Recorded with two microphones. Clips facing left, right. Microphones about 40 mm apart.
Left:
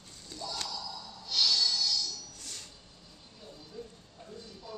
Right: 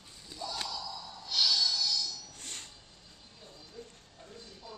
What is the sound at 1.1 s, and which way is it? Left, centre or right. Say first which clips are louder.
Music: even; centre.